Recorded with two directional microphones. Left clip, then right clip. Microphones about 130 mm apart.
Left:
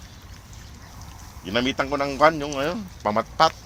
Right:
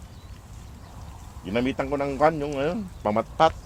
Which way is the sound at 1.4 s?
20° right (ahead or behind).